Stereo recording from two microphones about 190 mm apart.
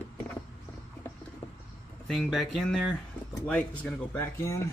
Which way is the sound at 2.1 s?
Centre (ahead or behind).